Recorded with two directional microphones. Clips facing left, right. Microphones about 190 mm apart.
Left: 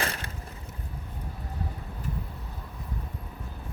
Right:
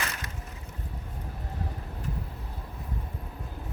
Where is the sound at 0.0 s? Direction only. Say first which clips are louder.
Left 4 dB; 30° left (ahead or behind).